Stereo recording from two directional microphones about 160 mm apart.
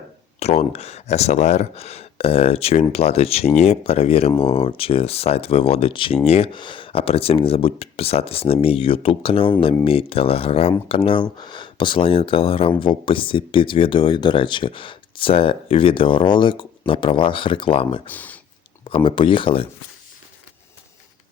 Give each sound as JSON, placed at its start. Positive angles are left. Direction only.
{"t": 0.3, "sound": "speech", "side_deg": 40}
{"t": 18.1, "sound": "speech", "side_deg": 10}
{"t": 18.9, "sound": "speech", "side_deg": 30}